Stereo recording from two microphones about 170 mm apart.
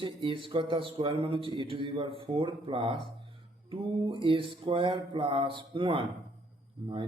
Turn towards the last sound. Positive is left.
turn(degrees=-30)  # may be behind; listen again after turning